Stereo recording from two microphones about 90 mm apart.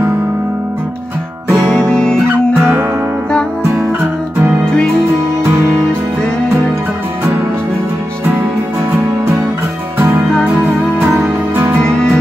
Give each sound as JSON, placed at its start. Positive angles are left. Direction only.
{"t": 1.5, "sound": "music", "side_deg": -35}
{"t": 2.0, "sound": "music", "side_deg": 10}
{"t": 2.2, "sound": "music", "side_deg": -25}
{"t": 11.1, "sound": "music", "side_deg": -20}
{"t": 11.8, "sound": "music", "side_deg": 10}